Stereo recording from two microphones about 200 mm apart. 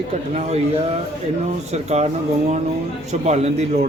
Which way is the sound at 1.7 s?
35° right (ahead or behind).